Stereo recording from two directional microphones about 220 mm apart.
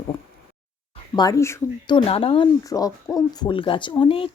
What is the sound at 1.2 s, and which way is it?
Speech, 15° left (ahead or behind).